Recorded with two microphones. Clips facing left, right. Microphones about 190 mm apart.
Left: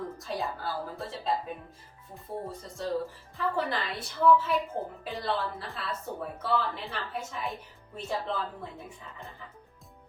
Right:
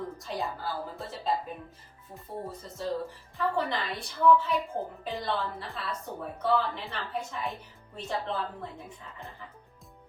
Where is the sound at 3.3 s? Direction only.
5° left (ahead or behind).